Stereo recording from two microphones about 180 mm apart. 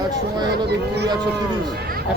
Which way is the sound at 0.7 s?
70° right (ahead or behind).